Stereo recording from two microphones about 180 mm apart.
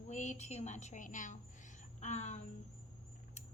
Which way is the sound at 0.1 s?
40° left (ahead or behind).